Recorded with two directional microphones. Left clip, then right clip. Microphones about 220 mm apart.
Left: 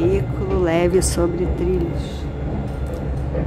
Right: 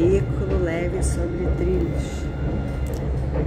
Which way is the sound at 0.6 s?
25° left (ahead or behind).